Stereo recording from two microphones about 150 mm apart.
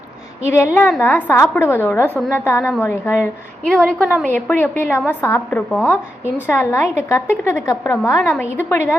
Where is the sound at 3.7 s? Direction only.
5° left (ahead or behind).